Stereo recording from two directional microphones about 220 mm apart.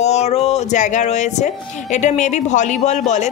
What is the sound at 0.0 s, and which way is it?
Speech, 30° left (ahead or behind).